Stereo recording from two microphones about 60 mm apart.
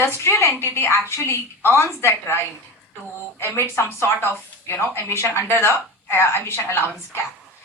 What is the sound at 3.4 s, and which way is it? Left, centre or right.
Speech, left.